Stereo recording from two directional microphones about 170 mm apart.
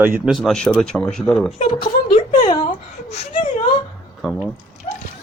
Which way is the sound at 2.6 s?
40° left (ahead or behind).